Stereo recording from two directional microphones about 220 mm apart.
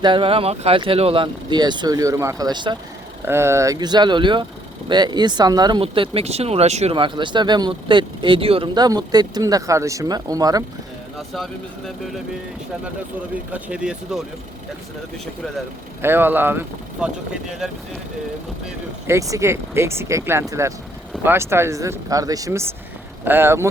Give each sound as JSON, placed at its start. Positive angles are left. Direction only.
{"t": 0.0, "sound": "speech", "side_deg": -20}
{"t": 11.9, "sound": "speech", "side_deg": 0}
{"t": 13.3, "sound": "speech", "side_deg": -5}
{"t": 16.0, "sound": "speech", "side_deg": -10}